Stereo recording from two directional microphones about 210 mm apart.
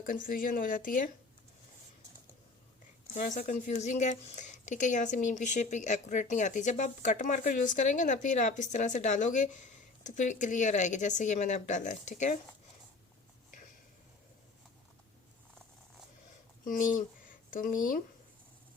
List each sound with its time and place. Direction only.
0.0 s speech: 40° left (ahead or behind)
3.2 s speech: 35° left (ahead or behind)
16.6 s speech: 40° left (ahead or behind)